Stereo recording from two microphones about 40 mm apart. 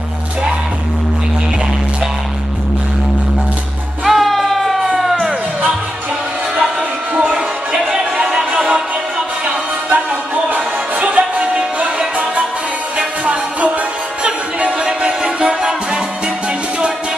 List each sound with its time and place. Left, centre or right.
4.0 s music: centre
4.8 s music: centre
7.2 s music: right
9.8 s music: right